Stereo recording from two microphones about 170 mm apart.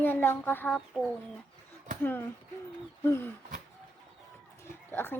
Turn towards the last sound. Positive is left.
turn(degrees=10)  # may be behind; listen again after turning